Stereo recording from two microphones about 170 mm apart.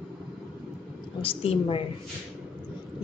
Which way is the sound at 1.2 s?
35° left (ahead or behind).